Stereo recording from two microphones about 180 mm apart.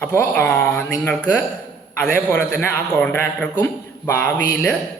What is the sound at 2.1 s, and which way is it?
Speech, 50° right (ahead or behind).